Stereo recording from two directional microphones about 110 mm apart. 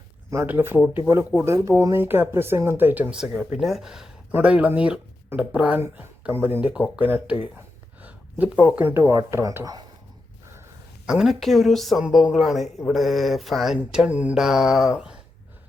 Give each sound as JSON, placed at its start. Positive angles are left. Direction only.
{"t": 0.3, "sound": "speech", "side_deg": -20}
{"t": 3.6, "sound": "mantra", "side_deg": 0}
{"t": 4.3, "sound": "speech", "side_deg": -15}
{"t": 5.8, "sound": "speech", "side_deg": -20}
{"t": 11.0, "sound": "mantra", "side_deg": -5}